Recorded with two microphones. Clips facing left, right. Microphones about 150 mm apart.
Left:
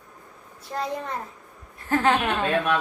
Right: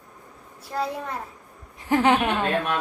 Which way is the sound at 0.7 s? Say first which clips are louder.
Right 1 dB; 5° right (ahead or behind).